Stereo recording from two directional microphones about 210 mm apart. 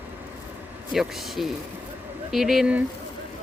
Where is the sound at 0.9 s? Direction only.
Centre (ahead or behind).